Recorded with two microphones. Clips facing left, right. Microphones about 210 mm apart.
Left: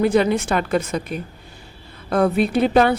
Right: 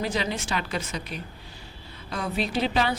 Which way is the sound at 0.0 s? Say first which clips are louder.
Left 11 dB; 55° left (ahead or behind).